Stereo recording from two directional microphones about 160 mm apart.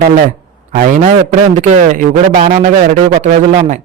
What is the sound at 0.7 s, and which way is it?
A man's voice, 50° right (ahead or behind).